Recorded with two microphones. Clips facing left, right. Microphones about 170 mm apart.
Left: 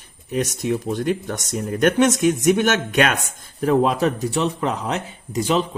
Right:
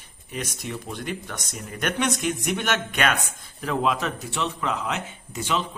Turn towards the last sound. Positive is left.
turn(degrees=35)  # may be behind; listen again after turning